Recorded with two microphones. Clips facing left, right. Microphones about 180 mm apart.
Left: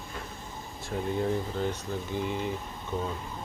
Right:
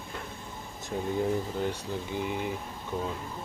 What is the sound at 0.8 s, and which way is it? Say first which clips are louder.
Speech: even; 15° right (ahead or behind).